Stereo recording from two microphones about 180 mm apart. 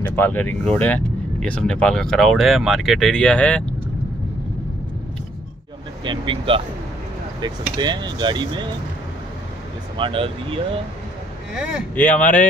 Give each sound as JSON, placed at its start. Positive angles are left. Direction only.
{"t": 0.0, "sound": "speech", "side_deg": 10}
{"t": 6.0, "sound": "speech", "side_deg": -30}
{"t": 9.9, "sound": "speech", "side_deg": -30}
{"t": 11.9, "sound": "speech", "side_deg": 10}